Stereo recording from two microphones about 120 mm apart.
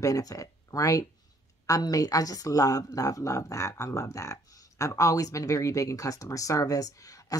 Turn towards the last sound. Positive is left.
turn(degrees=30)  # may be behind; listen again after turning